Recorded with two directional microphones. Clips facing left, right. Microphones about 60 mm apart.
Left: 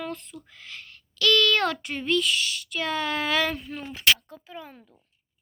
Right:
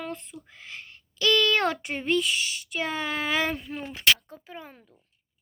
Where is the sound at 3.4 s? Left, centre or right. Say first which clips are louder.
Left 1 dB; right.